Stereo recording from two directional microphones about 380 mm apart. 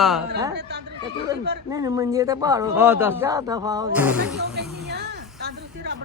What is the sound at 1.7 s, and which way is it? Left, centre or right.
A woman's voice, centre.